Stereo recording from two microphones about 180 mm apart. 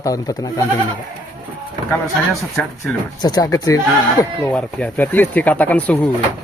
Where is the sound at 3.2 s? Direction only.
20° left (ahead or behind).